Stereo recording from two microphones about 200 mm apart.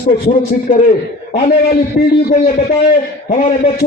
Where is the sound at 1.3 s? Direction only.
45° left (ahead or behind).